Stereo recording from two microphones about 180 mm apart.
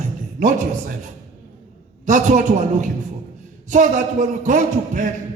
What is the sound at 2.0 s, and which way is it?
A man's voice, 45° right (ahead or behind).